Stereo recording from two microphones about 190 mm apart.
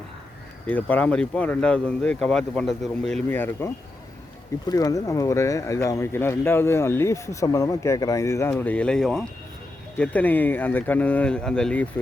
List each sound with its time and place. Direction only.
0.7 s speech: 10° left (ahead or behind)